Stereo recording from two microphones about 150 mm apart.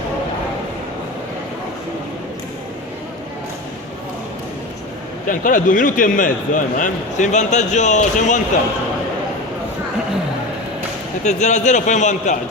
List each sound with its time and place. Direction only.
5.3 s a man's voice: 65° left (ahead or behind)
11.2 s a man's voice: 50° left (ahead or behind)